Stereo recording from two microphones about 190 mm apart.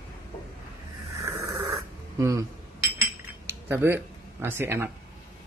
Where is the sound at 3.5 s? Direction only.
10° right (ahead or behind).